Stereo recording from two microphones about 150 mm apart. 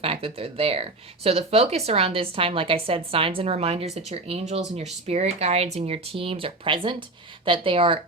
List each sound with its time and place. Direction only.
0.0 s speech: 40° right (ahead or behind)